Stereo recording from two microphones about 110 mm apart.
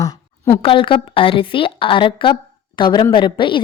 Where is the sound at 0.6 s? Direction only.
50° left (ahead or behind).